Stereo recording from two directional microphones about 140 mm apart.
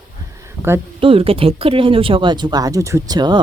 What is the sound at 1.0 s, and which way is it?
Speech, 40° right (ahead or behind).